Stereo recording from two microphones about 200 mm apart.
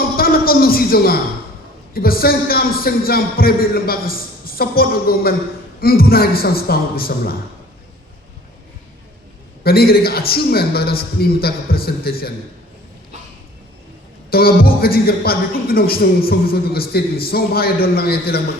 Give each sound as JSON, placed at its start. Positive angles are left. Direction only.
{"t": 0.2, "sound": "a man's voice", "side_deg": 45}
{"t": 9.6, "sound": "a man's voice", "side_deg": 50}
{"t": 14.3, "sound": "a man's voice", "side_deg": 50}